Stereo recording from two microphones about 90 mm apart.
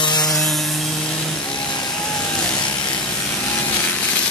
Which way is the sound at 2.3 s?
15° left (ahead or behind).